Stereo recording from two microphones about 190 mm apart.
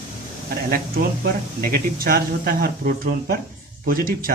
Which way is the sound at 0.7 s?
50° right (ahead or behind).